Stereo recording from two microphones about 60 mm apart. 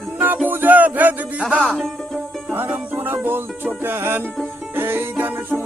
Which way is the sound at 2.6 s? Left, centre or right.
Right.